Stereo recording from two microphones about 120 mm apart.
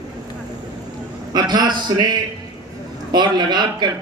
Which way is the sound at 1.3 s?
35° right (ahead or behind).